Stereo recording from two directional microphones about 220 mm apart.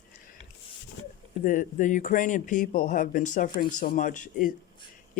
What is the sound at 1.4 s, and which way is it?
Speech, 35° left (ahead or behind).